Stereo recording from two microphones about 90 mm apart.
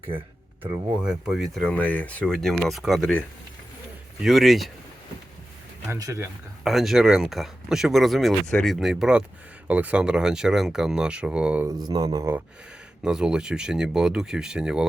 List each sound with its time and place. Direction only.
1.0 s speech: 5° right (ahead or behind)
1.6 s speech: 15° left (ahead or behind)
2.3 s speech: 5° left (ahead or behind)
4.2 s speech: centre (ahead or behind)
5.9 s speech: 35° right (ahead or behind)
6.7 s speech: 5° right (ahead or behind)
11.7 s speech: 50° right (ahead or behind)
13.0 s speech: 10° right (ahead or behind)